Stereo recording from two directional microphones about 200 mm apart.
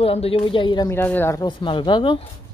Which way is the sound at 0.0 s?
30° left (ahead or behind).